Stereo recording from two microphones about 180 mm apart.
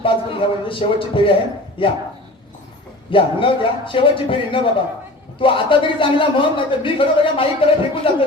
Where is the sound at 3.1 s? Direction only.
30° left (ahead or behind).